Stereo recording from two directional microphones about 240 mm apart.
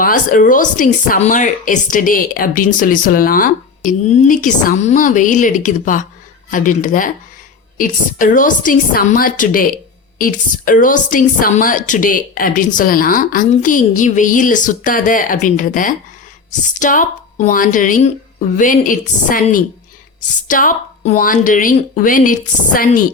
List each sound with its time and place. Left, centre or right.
0.0 s a woman's voice: left